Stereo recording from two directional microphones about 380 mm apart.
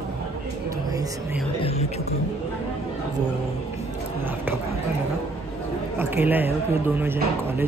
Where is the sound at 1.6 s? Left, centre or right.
Centre.